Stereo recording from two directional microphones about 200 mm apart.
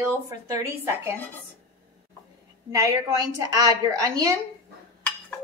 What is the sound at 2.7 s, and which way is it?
Speech, 15° right (ahead or behind).